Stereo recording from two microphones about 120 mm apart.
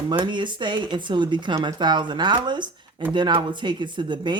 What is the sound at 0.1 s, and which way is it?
Speech, 40° right (ahead or behind).